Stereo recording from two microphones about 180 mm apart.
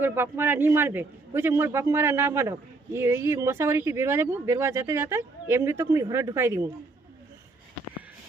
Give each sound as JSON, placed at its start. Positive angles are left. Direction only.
{"t": 0.0, "sound": "a man's voice", "side_deg": -10}